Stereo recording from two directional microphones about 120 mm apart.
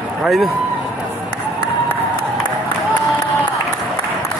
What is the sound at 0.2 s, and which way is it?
Speech, centre (ahead or behind).